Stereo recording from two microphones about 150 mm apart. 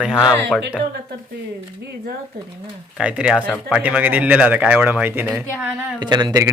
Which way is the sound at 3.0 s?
5° right (ahead or behind).